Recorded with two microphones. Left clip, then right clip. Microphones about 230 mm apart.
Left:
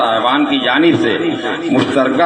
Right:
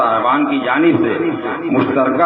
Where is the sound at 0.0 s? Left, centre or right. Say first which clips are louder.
Left 1 dB; left.